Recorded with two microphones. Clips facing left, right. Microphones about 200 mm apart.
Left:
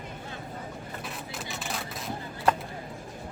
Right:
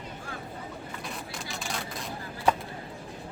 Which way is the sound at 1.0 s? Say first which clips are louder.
Even; centre (ahead or behind).